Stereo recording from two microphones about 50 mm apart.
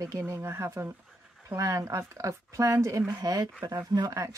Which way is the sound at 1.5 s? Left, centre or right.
Right.